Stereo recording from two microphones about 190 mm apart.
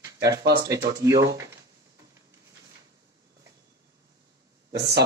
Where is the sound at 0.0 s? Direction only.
15° right (ahead or behind).